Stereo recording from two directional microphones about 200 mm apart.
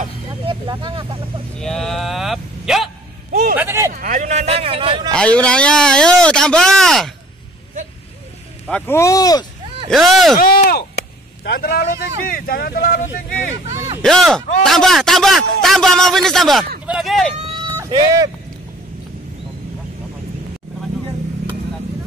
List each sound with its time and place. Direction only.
0.5 s speech: 25° right (ahead or behind)
1.6 s speech: centre (ahead or behind)
3.3 s vehicle: 45° right (ahead or behind)
3.5 s speech: 10° right (ahead or behind)
3.9 s a man's voice: 40° right (ahead or behind)
5.1 s speech: 5° left (ahead or behind)
8.6 s speech: 10° left (ahead or behind)
9.8 s speech: centre (ahead or behind)
10.4 s speech: 45° left (ahead or behind)
14.0 s speech: centre (ahead or behind)
17.7 s speech: 20° right (ahead or behind)